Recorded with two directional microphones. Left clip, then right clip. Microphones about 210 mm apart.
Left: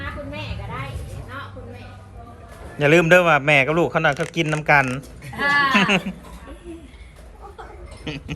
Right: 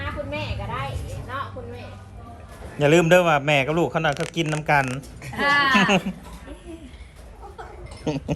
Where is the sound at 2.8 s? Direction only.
15° right (ahead or behind).